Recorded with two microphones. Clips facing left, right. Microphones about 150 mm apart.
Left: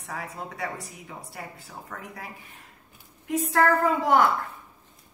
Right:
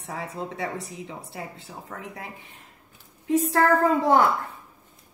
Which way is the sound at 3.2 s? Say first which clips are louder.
Right 3 dB; 30° right (ahead or behind).